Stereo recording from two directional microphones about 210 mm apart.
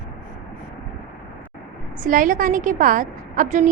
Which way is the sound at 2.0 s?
40° right (ahead or behind).